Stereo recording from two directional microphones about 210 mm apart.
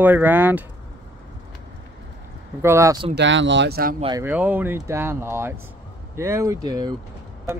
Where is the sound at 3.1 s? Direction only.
60° right (ahead or behind).